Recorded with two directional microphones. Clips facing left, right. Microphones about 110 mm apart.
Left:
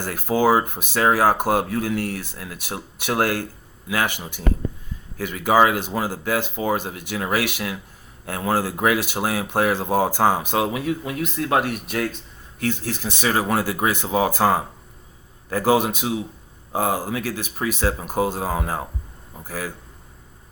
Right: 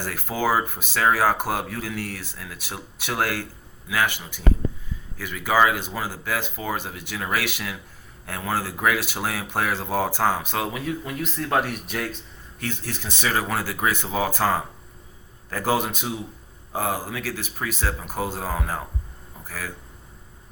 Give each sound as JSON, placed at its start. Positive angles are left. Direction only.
{"t": 0.0, "sound": "speech", "side_deg": 20}
{"t": 5.2, "sound": "a man's voice", "side_deg": 20}